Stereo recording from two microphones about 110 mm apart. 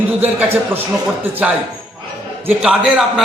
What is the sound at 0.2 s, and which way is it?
Speech, 20° right (ahead or behind).